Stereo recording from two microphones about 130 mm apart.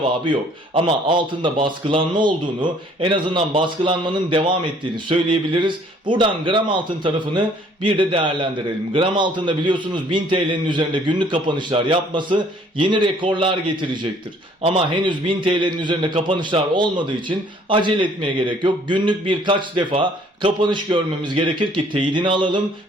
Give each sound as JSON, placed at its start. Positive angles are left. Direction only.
{"t": 0.0, "sound": "a man's voice", "side_deg": -40}